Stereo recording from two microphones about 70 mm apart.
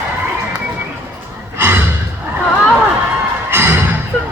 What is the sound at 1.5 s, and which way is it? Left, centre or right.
Gasp, right.